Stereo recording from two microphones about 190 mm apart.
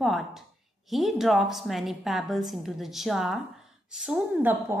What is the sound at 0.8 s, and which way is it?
A woman's voice, centre (ahead or behind).